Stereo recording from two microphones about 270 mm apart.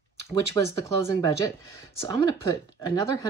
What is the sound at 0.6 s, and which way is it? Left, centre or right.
Speech, centre.